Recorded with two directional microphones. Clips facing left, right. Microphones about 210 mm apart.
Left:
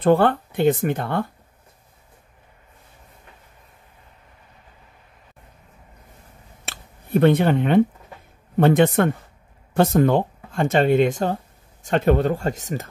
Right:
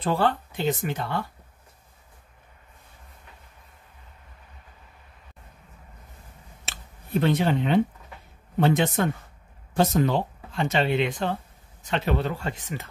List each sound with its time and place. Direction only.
0.0 s speech: 55° left (ahead or behind)
6.6 s a sound: 55° left (ahead or behind)
8.5 s speech: 55° left (ahead or behind)